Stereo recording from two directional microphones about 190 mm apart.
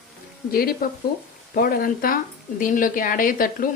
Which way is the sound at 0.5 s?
50° left (ahead or behind).